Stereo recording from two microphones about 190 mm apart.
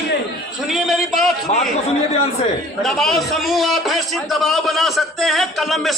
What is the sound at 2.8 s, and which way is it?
A man's voice, centre (ahead or behind).